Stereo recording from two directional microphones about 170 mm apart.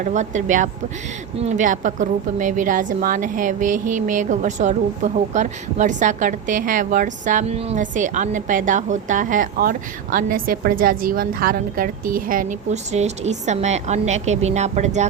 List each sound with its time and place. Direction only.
0.0 s a woman's voice: 45° right (ahead or behind)